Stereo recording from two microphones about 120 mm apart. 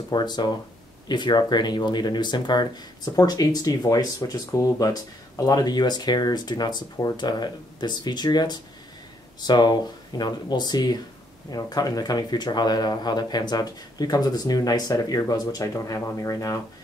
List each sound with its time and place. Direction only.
0.1 s speech: 35° left (ahead or behind)